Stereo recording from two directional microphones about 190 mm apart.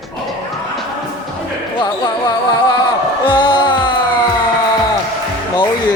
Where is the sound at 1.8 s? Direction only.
25° left (ahead or behind).